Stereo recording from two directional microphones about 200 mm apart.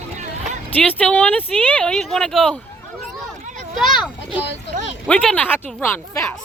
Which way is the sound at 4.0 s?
Centre (ahead or behind).